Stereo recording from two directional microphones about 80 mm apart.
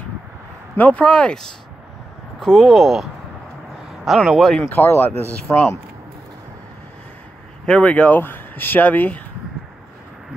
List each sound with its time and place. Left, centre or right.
0.7 s speech: centre
4.6 s speech: left
7.6 s speech: centre